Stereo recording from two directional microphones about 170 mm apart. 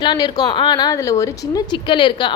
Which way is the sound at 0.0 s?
25° left (ahead or behind).